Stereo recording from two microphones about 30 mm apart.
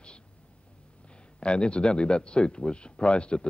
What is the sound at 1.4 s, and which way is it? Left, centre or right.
A man's voice, left.